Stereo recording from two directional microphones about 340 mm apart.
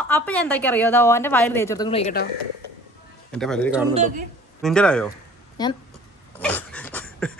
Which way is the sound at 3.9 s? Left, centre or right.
Right.